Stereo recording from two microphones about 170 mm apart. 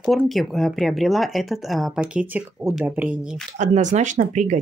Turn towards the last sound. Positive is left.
turn(degrees=-45)  # may be behind; listen again after turning